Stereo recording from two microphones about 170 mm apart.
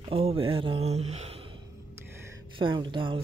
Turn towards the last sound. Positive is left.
turn(degrees=-30)  # may be behind; listen again after turning